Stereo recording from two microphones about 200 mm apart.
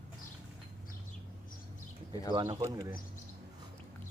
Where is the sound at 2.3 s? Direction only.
20° right (ahead or behind).